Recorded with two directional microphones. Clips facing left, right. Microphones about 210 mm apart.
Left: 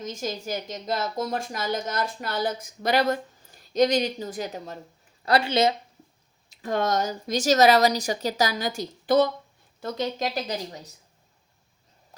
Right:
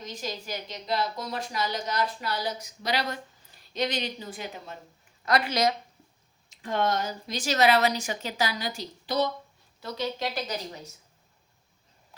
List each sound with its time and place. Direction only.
0.0 s a woman's voice: 45° left (ahead or behind)
5.2 s speech: 30° left (ahead or behind)
6.5 s a woman's voice: 40° left (ahead or behind)